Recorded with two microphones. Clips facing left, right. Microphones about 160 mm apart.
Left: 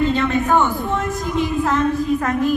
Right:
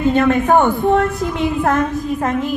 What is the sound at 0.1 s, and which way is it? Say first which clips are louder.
A man's voice: right 4 dB; 50° right (ahead or behind).